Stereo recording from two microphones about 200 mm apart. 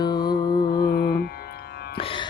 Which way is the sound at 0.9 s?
50° left (ahead or behind).